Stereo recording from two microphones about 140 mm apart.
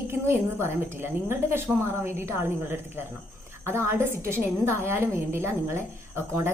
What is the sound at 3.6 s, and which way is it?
A woman's voice, 15° right (ahead or behind).